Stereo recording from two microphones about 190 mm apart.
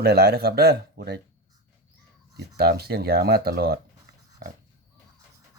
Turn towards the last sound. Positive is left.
turn(degrees=-55)  # may be behind; listen again after turning